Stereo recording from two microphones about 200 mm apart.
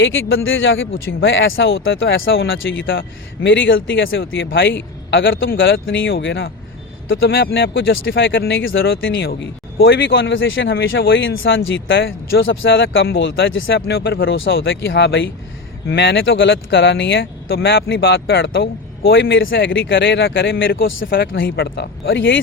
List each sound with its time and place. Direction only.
0.0 s speech: 75° left (ahead or behind)
7.2 s speech: 50° left (ahead or behind)
14.6 s speech: 70° left (ahead or behind)
19.1 s speech: 70° left (ahead or behind)
21.0 s speech: 45° left (ahead or behind); by 22.4 s 65° left (ahead or behind)